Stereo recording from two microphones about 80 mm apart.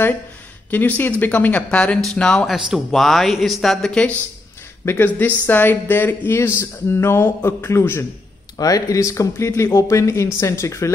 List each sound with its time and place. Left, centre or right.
0.7 s speech: left
1.8 s speech: centre
2.4 s speech: centre
4.8 s speech: left
8.5 s speech: left